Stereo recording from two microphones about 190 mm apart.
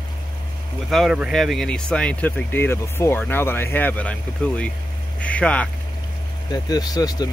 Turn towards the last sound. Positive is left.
turn(degrees=20)  # may be behind; listen again after turning